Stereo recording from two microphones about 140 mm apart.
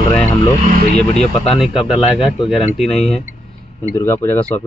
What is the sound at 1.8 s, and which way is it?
Speech, 5° right (ahead or behind).